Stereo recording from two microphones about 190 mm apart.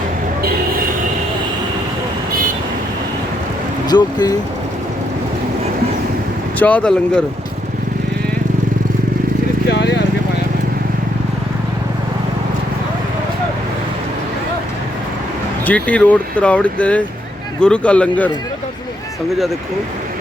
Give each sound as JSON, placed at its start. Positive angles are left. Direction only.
{"t": 3.8, "sound": "speech", "side_deg": 20}
{"t": 6.6, "sound": "speech", "side_deg": 5}
{"t": 9.6, "sound": "speech", "side_deg": 65}
{"t": 15.6, "sound": "speech", "side_deg": 10}